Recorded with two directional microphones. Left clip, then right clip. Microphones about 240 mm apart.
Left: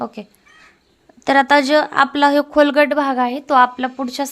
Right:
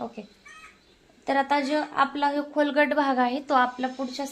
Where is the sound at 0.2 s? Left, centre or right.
Left.